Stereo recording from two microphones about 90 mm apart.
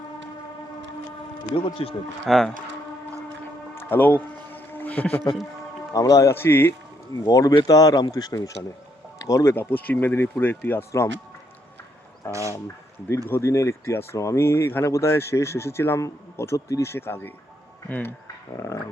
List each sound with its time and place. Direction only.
1.5 s speech: 90° left
2.3 s speech: 5° left (ahead or behind)
3.8 s a sound: 20° left (ahead or behind)
5.9 s speech: 40° left (ahead or behind)
7.3 s speech: 40° left (ahead or behind)
12.3 s speech: 35° right (ahead or behind)
12.5 s speech: 30° left (ahead or behind)